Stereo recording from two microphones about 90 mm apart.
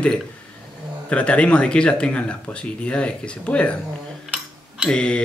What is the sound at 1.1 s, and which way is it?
Speech, 15° left (ahead or behind).